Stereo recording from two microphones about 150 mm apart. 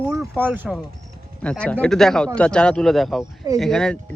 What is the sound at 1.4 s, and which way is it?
Speech, 10° left (ahead or behind).